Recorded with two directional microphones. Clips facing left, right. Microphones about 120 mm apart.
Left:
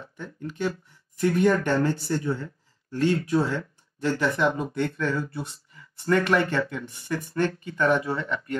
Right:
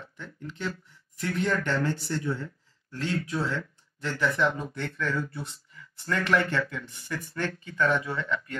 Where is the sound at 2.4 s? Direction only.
25° left (ahead or behind).